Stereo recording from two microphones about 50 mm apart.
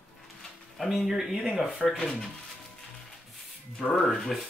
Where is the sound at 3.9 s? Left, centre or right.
Centre.